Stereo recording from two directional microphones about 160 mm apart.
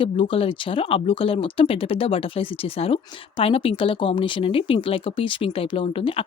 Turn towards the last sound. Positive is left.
turn(degrees=35)  # may be behind; listen again after turning